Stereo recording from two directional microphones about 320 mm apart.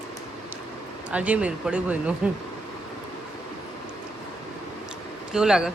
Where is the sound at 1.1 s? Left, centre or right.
Centre.